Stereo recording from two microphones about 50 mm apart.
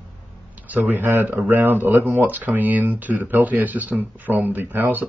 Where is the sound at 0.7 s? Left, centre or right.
Right.